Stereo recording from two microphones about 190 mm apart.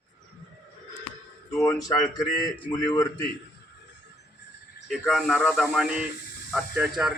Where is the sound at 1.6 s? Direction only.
15° left (ahead or behind).